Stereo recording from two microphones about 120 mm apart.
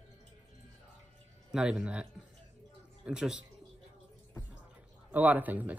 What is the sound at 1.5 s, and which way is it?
Speech, 5° right (ahead or behind).